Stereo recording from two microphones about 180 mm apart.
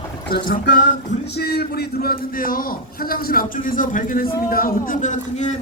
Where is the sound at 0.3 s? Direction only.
60° left (ahead or behind).